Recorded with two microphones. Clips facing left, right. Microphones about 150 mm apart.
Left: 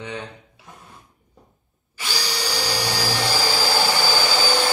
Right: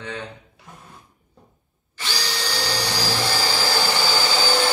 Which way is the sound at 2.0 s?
10° left (ahead or behind).